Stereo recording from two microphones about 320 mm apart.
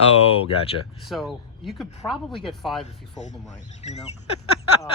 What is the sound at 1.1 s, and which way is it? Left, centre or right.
Speech, centre.